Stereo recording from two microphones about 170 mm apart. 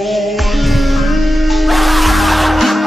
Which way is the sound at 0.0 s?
Centre (ahead or behind).